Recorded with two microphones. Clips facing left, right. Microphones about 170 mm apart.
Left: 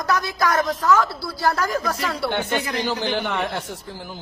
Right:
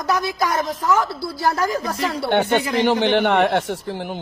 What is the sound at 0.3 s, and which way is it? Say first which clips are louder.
A woman's voice: even; 20° right (ahead or behind).